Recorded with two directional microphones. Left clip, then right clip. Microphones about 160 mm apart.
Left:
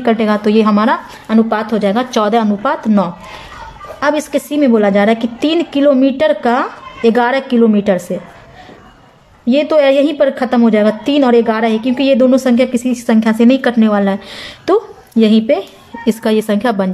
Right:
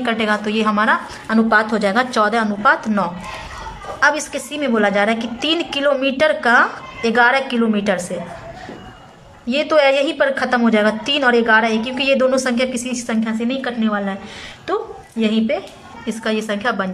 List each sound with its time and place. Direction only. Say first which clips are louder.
0.0 s a woman's voice: left 5 dB; 30° left (ahead or behind)
1.3 s a woman's voice: left 1 dB; 10° left (ahead or behind)
9.5 s a woman's voice: left 4 dB; 25° left (ahead or behind)
13.2 s a woman's voice: left 13 dB; 45° left (ahead or behind); by 16.9 s 30° left (ahead or behind)